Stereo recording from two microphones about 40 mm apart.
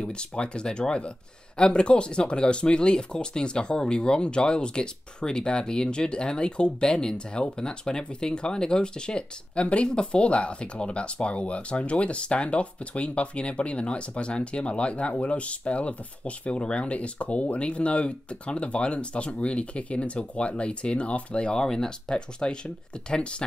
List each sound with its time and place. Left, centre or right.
0.0 s speech: left
21.5 s speech: centre